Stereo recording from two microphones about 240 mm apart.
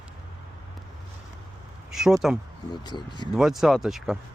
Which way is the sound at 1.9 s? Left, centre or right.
Centre.